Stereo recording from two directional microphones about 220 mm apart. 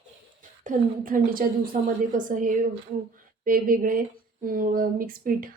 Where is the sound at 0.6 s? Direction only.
35° right (ahead or behind).